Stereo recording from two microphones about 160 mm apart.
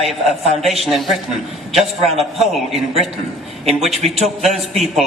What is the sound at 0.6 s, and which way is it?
Speech, centre (ahead or behind).